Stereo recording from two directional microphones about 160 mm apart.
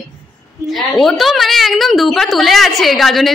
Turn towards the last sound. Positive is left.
turn(degrees=0)  # may be behind; listen again after turning